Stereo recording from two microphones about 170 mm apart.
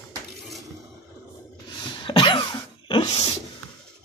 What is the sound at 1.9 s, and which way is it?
Cough, 25° left (ahead or behind).